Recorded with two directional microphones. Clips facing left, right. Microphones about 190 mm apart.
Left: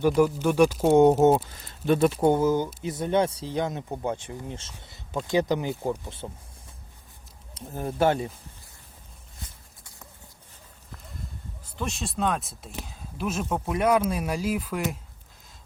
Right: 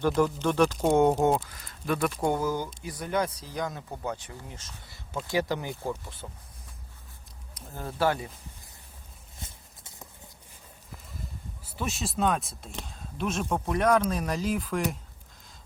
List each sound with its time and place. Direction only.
0.0 s speech: 5° left (ahead or behind)
1.2 s speech: 25° left (ahead or behind)
7.5 s speech: 20° left (ahead or behind)
11.6 s speech: 5° right (ahead or behind)